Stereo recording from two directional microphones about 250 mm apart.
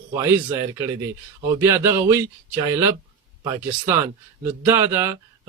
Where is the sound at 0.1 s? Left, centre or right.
Centre.